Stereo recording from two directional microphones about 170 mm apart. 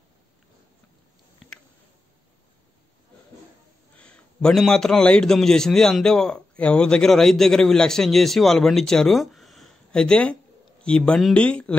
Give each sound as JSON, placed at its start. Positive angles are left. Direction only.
{"t": 3.9, "sound": "a man's voice", "side_deg": 5}